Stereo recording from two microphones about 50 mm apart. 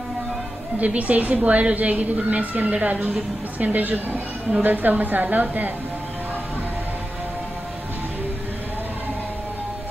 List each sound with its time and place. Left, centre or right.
0.7 s a woman's voice: right